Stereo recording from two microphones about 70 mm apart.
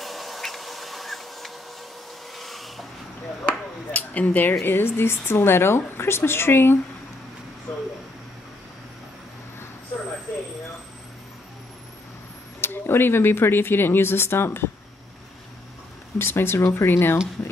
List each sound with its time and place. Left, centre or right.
0.0 s a sound: centre
3.4 s speech: left
7.7 s speech: left
12.5 s speech: left
16.2 s speech: left